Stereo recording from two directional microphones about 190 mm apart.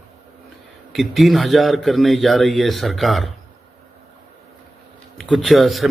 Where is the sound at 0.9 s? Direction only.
Centre (ahead or behind).